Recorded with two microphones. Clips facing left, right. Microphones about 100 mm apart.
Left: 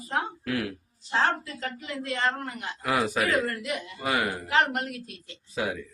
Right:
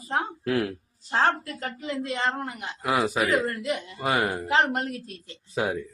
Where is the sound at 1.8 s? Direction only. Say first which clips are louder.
Right 1 dB; 20° right (ahead or behind).